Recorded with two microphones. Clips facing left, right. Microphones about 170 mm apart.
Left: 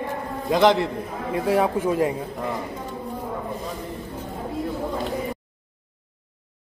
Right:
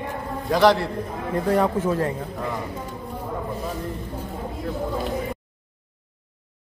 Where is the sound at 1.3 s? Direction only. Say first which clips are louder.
Even; 10° left (ahead or behind).